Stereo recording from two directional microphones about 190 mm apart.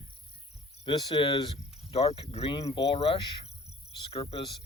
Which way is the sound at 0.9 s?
25° left (ahead or behind).